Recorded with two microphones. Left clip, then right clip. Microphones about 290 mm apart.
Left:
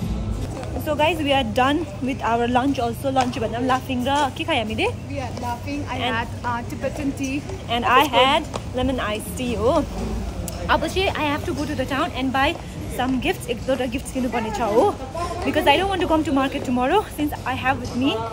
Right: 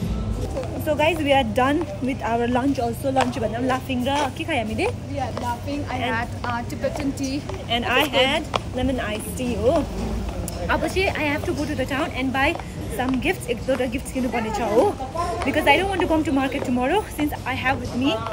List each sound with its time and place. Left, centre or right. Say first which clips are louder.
0.8 s a woman's voice: even; centre
5.7 s a woman's voice: left 3 dB; centre